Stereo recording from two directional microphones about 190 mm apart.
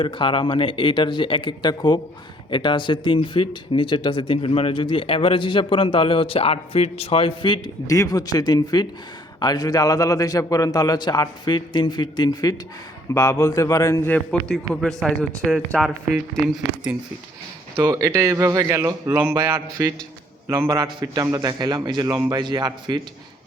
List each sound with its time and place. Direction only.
0.0 s a man's voice: 25° left (ahead or behind); by 16.4 s 5° left (ahead or behind)
17.7 s a man's voice: 20° right (ahead or behind)